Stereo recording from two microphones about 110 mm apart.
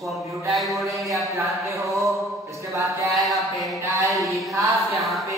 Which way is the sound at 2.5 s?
25° right (ahead or behind).